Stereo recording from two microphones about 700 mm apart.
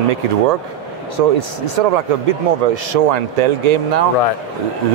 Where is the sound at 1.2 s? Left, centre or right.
Right.